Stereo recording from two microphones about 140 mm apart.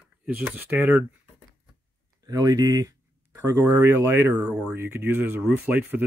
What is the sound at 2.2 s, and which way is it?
Speech, 25° right (ahead or behind).